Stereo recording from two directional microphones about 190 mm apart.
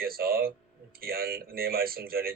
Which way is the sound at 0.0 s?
50° right (ahead or behind).